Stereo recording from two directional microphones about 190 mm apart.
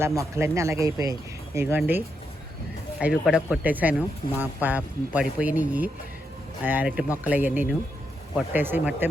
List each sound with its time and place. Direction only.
0.0 s speech: 15° right (ahead or behind)
3.0 s speech: 5° right (ahead or behind)